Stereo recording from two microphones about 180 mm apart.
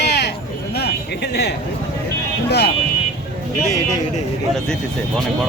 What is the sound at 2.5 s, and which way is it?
Speech, 65° left (ahead or behind).